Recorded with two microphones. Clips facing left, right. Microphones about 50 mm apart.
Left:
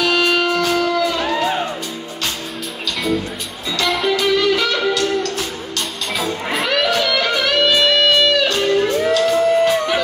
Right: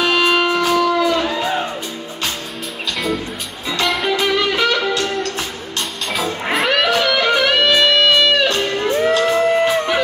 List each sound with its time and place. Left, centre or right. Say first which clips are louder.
0.0 s music: right 1 dB; right
0.7 s music: right 2 dB; centre
3.8 s music: left 1 dB; centre
4.2 s music: left 1 dB; right
6.5 s music: right 3 dB; centre
6.9 s music: right 2 dB; right